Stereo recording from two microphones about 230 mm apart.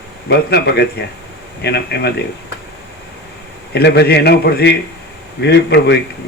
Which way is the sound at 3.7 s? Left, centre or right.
Left.